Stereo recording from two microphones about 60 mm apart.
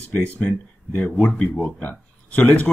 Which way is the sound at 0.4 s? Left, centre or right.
Centre.